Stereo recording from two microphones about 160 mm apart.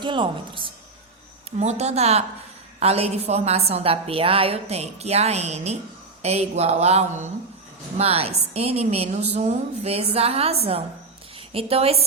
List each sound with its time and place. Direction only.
0.0 s a woman's voice: 30° right (ahead or behind)
1.5 s a woman's voice: 45° right (ahead or behind)